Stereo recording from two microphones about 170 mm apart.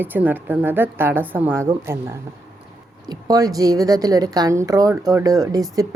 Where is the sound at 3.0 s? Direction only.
20° right (ahead or behind).